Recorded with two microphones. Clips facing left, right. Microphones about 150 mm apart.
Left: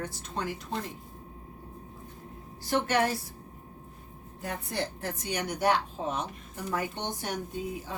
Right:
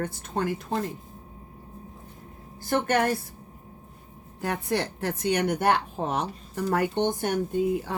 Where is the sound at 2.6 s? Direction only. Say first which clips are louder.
Right 3 dB; 50° right (ahead or behind).